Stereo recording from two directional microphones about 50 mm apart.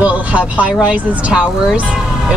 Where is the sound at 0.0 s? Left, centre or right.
Right.